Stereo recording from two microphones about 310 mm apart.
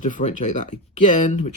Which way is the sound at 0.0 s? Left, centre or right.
Left.